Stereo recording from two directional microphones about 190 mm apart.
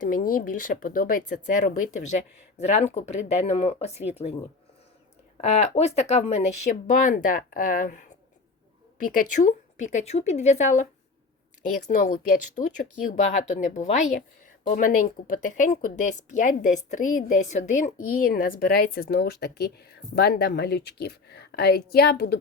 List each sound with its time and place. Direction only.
0.0 s speech: 45° left (ahead or behind)
5.4 s speech: 35° left (ahead or behind)
9.1 s speech: 40° left (ahead or behind)
11.9 s speech: 50° left (ahead or behind)